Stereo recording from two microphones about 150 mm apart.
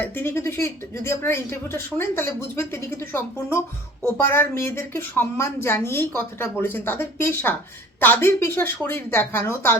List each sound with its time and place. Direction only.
0.0 s speech: 15° left (ahead or behind)